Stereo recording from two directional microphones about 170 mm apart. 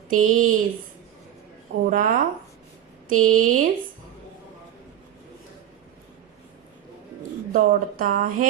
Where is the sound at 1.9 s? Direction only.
55° right (ahead or behind).